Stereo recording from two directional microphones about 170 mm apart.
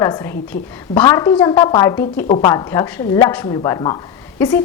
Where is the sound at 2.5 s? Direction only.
20° left (ahead or behind).